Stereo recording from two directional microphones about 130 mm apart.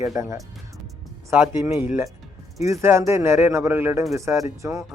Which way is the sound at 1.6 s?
15° right (ahead or behind).